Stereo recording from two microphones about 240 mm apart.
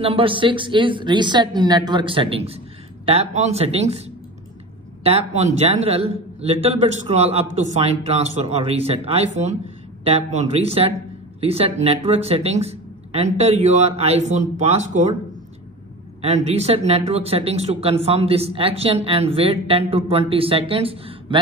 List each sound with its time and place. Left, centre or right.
0.0 s speech: right
16.2 s speech: right